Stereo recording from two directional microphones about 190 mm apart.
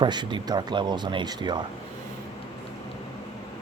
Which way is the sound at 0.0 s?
25° right (ahead or behind).